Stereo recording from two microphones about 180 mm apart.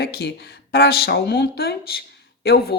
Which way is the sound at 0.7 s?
60° left (ahead or behind).